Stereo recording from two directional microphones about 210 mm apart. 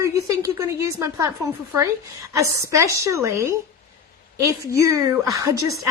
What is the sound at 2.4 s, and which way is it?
A woman's voice, 15° right (ahead or behind).